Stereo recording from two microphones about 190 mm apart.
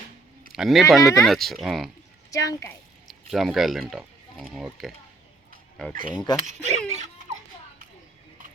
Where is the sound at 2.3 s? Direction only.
15° left (ahead or behind).